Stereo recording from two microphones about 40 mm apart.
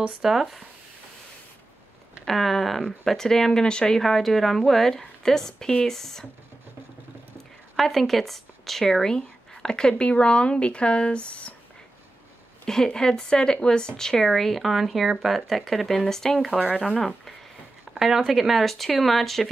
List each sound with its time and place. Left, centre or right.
0.2 s speech: centre
2.2 s speech: centre; by 4.0 s left
4.0 s speech: centre
7.7 s speech: centre
9.1 s speech: centre
12.6 s speech: centre
14.7 s speech: centre
17.9 s speech: centre